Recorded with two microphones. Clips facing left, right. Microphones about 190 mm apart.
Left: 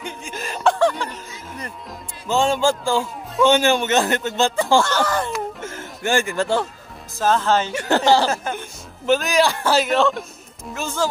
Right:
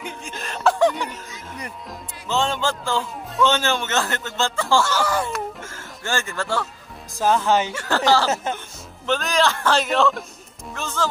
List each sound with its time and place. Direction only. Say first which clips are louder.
0.0 s chuckle: left 2 dB; centre (ahead or behind)
0.7 s music: even; 15° right (ahead or behind)
2.2 s a man's voice: left 5 dB; 10° left (ahead or behind)
4.8 s speech: left 1 dB; 10° right (ahead or behind)
5.6 s music: left 6 dB; 20° left (ahead or behind)
7.2 s speech: even; 15° right (ahead or behind)
7.7 s a man's voice: left 3 dB; 20° left (ahead or behind)